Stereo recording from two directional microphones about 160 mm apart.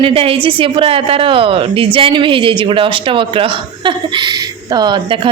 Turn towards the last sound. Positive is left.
turn(degrees=-30)  # may be behind; listen again after turning